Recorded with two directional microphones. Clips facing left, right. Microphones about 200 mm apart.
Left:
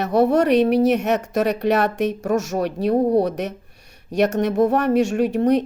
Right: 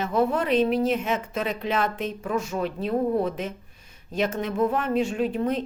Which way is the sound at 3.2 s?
70° left (ahead or behind).